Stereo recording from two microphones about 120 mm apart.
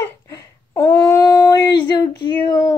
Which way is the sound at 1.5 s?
35° left (ahead or behind).